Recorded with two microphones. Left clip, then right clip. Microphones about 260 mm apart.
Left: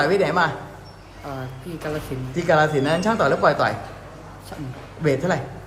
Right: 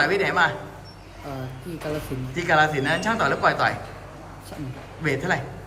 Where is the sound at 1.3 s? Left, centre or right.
Centre.